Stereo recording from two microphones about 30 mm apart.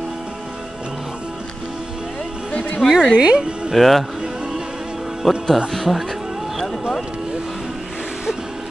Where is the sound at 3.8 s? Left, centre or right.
Centre.